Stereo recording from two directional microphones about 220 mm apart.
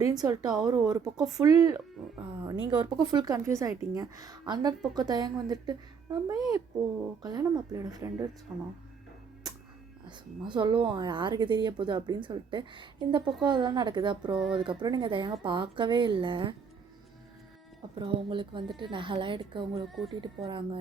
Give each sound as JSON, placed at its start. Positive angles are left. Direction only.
{"t": 0.0, "sound": "speech", "side_deg": -15}
{"t": 10.1, "sound": "speech", "side_deg": -20}
{"t": 18.0, "sound": "speech", "side_deg": -20}
{"t": 19.9, "sound": "speech", "side_deg": 0}
{"t": 20.2, "sound": "speech", "side_deg": -20}